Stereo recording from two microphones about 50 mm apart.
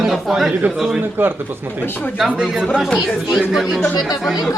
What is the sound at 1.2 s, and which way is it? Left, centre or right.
Speech, right.